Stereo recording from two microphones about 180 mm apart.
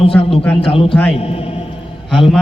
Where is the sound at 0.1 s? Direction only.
10° left (ahead or behind).